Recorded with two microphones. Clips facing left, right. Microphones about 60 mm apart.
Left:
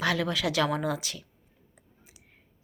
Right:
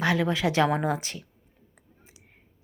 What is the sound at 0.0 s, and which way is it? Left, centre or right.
Speech, right.